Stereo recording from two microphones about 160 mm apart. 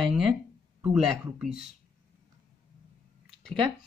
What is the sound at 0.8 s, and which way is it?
Speech, 5° right (ahead or behind).